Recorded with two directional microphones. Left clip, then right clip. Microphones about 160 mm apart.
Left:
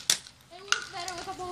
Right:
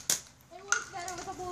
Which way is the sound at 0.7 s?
10° right (ahead or behind).